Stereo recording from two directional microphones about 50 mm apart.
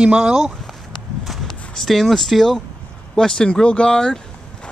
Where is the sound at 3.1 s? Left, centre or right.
Centre.